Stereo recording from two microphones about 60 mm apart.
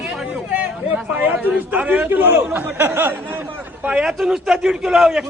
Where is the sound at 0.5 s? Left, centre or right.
Right.